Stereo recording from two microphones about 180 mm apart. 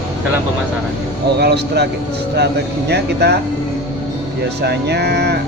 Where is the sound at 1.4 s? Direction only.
65° right (ahead or behind).